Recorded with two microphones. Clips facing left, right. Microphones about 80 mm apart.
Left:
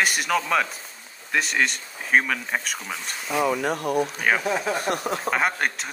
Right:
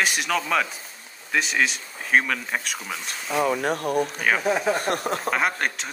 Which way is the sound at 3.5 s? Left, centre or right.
Right.